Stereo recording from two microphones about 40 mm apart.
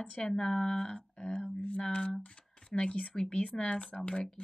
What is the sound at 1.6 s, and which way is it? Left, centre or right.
Speech, left.